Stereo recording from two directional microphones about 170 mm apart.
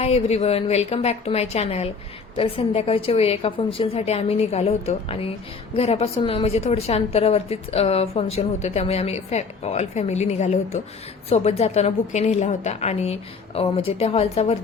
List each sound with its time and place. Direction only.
0.0 s a woman's voice: 35° left (ahead or behind)